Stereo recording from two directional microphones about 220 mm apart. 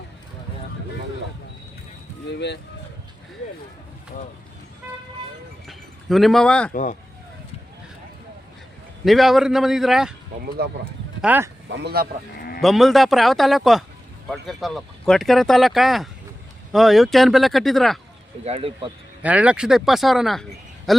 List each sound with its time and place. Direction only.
2.3 s speech: 50° left (ahead or behind)
5.6 s chink: centre (ahead or behind)
9.0 s speech: centre (ahead or behind)
10.6 s speech: 45° right (ahead or behind)
11.2 s speech: 5° right (ahead or behind)
11.7 s speech: 50° right (ahead or behind)
12.4 s livestock: 45° left (ahead or behind)
12.6 s speech: centre (ahead or behind)
18.4 s speech: 25° right (ahead or behind)
19.2 s speech: 5° right (ahead or behind)